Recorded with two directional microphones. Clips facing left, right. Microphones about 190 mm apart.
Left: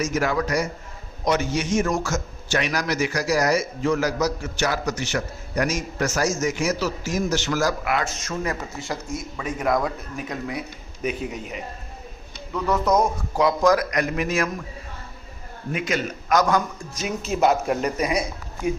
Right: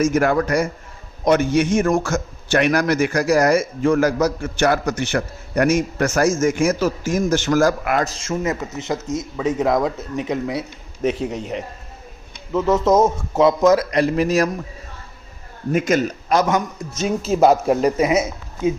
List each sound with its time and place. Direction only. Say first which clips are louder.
0.0 s a man's voice: right 6 dB; 55° right (ahead or behind)
8.1 s speech: right 5 dB; 25° right (ahead or behind)
12.5 s speech: right 5 dB; 25° right (ahead or behind)
15.7 s a man's voice: right 8 dB; 45° right (ahead or behind)
16.3 s speech: right 1 dB; 25° right (ahead or behind)
17.0 s speech: right 6 dB; 35° right (ahead or behind)